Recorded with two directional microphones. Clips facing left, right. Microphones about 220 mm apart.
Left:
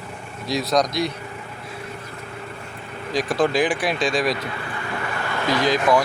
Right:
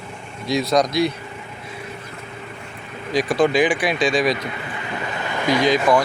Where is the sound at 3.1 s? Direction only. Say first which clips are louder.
Right 3 dB; centre (ahead or behind).